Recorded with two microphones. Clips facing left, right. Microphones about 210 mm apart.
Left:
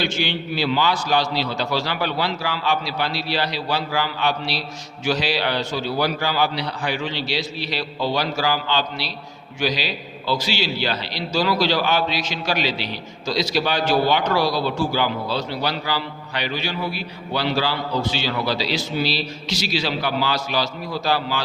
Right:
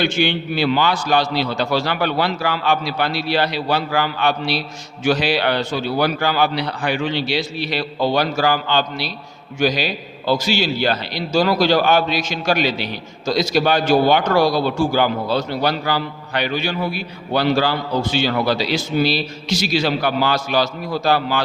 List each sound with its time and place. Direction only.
0.0 s a man's voice: 55° right (ahead or behind)